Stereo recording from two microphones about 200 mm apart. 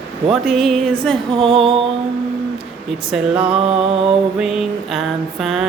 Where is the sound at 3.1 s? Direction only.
5° right (ahead or behind).